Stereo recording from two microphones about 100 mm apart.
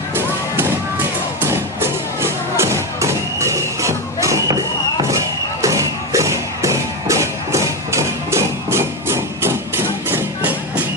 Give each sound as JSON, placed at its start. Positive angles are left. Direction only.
{"t": 1.4, "sound": "music", "side_deg": -25}
{"t": 5.6, "sound": "music", "side_deg": -30}